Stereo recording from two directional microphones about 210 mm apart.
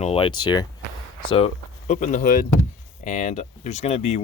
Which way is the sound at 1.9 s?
35° left (ahead or behind).